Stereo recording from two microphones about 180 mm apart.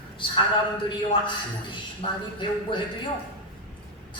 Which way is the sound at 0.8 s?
25° left (ahead or behind).